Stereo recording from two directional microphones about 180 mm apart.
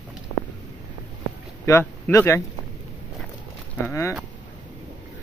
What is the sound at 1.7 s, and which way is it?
Speech, 15° left (ahead or behind).